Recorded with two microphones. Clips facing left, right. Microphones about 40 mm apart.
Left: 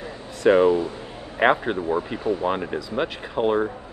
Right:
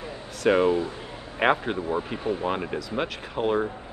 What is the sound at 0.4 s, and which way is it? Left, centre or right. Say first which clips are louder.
Speech: left 4 dB; centre.